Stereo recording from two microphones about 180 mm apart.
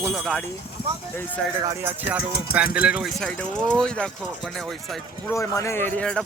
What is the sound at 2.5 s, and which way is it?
Speech, 55° left (ahead or behind).